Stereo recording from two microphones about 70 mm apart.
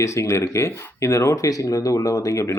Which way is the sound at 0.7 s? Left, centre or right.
Left.